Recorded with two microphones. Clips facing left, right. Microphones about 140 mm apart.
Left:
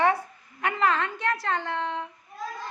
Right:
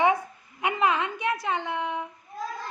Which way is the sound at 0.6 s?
15° right (ahead or behind).